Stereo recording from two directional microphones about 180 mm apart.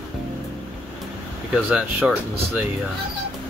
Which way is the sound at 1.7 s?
5° right (ahead or behind).